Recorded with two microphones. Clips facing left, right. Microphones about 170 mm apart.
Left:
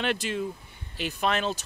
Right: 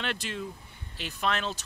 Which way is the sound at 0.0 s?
10° left (ahead or behind).